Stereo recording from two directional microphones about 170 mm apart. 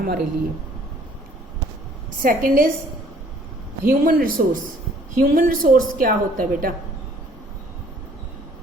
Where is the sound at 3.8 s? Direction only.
60° right (ahead or behind).